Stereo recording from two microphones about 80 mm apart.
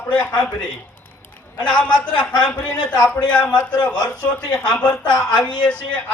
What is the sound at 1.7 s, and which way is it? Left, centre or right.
Speech, centre.